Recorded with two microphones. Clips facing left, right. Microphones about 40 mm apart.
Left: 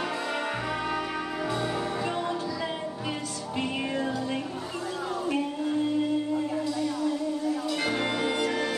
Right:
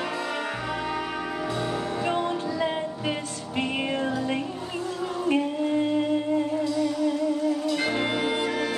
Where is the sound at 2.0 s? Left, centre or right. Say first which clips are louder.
Right 3 dB; right.